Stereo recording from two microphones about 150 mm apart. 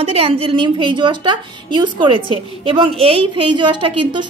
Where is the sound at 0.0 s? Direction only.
40° right (ahead or behind).